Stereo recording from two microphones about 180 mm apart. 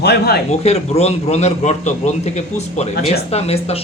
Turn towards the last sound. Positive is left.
turn(degrees=35)  # may be behind; listen again after turning